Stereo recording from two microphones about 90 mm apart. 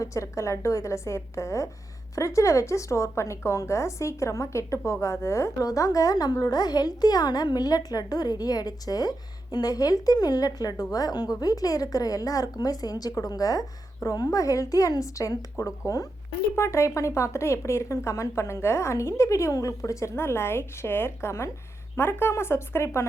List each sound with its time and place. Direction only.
0.0 s a woman's voice: 35° left (ahead or behind)